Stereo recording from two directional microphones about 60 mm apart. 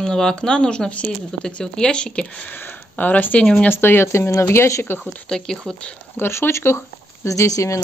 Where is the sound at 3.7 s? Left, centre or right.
Left.